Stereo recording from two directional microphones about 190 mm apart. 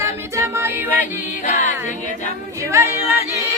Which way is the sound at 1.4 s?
40° left (ahead or behind).